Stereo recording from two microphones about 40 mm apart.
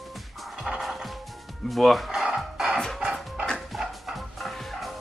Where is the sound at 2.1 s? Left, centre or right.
Centre.